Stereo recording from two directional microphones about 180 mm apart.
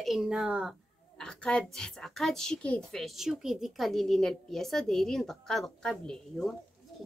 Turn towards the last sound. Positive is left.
turn(degrees=0)  # may be behind; listen again after turning